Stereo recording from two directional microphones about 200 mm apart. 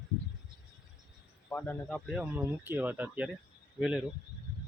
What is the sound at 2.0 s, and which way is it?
Speech, 5° right (ahead or behind).